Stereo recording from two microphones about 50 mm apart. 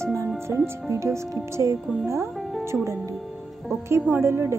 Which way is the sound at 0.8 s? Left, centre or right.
Right.